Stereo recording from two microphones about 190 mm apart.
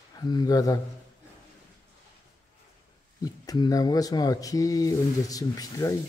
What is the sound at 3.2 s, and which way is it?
Speech, 20° left (ahead or behind).